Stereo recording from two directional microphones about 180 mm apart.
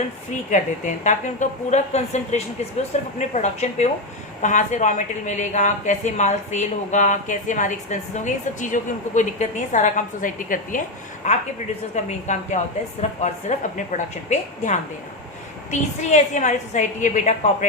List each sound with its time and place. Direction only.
0.5 s a woman's voice: 40° left (ahead or behind)
12.0 s a woman's voice: 40° left (ahead or behind)